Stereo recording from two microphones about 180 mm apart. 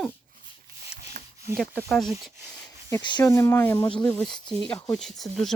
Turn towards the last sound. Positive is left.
turn(degrees=0)  # may be behind; listen again after turning